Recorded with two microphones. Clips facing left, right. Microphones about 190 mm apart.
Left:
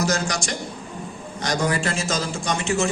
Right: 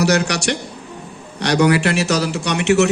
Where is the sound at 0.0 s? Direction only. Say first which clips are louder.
Right 7 dB; 70° right (ahead or behind).